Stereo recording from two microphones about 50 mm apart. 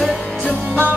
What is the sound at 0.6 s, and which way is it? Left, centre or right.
Music, right.